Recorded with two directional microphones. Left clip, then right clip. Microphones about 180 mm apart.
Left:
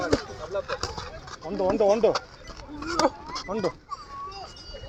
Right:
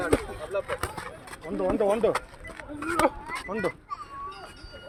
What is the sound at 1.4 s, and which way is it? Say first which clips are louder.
Speech: left 2 dB; 30° left (ahead or behind).